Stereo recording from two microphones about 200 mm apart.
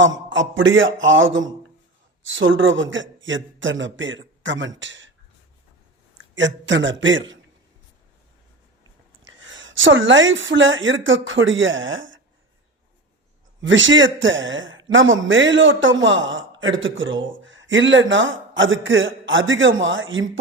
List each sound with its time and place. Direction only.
0.0 s a man's voice: 70° right (ahead or behind)
6.3 s a man's voice: 65° right (ahead or behind)
9.2 s speech: 70° right (ahead or behind)
13.6 s a man's voice: 70° right (ahead or behind)